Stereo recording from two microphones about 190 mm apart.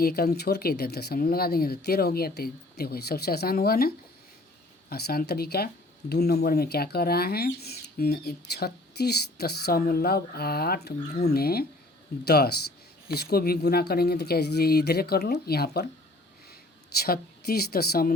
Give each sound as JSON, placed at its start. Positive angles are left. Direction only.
{"t": 0.0, "sound": "speech", "side_deg": 55}
{"t": 17.0, "sound": "speech", "side_deg": 55}